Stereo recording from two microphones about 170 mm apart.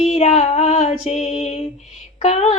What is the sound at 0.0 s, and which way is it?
Female singing, 40° left (ahead or behind).